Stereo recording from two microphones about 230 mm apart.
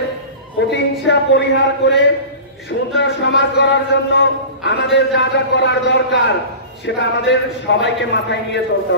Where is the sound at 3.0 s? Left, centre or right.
Left.